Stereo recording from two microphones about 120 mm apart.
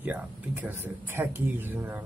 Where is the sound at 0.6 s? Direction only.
20° right (ahead or behind).